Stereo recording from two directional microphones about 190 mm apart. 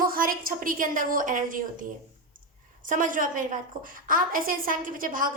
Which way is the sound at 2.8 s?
45° right (ahead or behind).